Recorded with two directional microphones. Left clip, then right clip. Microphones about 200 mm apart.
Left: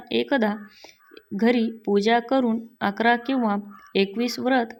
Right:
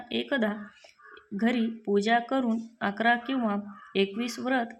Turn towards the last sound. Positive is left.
turn(degrees=20)  # may be behind; listen again after turning